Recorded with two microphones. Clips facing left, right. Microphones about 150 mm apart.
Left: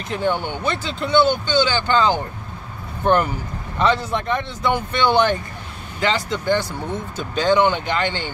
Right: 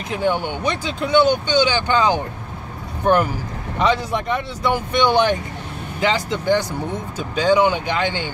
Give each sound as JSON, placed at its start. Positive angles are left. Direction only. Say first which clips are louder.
{"t": 0.1, "sound": "speech", "louder": "right 1 dB", "side_deg": -10}
{"t": 3.8, "sound": "speech", "louder": "even", "side_deg": -10}